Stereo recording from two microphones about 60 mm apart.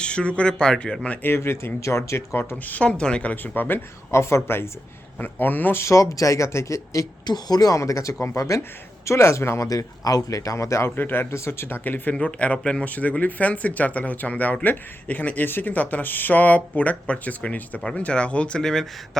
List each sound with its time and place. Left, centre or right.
0.0 s speech: centre
1.2 s speech: left
2.6 s speech: left
3.4 s speech: left
4.1 s speech: left
5.2 s speech: left
5.8 s speech: left
9.0 s speech: left
9.6 s speech: left
10.9 s speech: left
11.9 s speech: left
18.6 s speech: centre